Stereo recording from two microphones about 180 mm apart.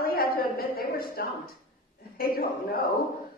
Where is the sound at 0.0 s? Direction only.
55° left (ahead or behind).